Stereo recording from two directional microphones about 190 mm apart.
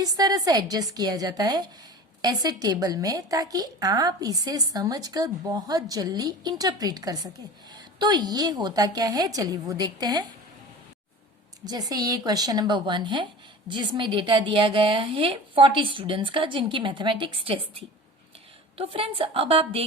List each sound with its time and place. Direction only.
0.0 s a woman's voice: 20° right (ahead or behind)
11.6 s a woman's voice: 20° right (ahead or behind)